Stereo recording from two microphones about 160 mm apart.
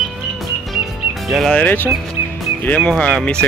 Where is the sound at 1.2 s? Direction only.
Centre (ahead or behind).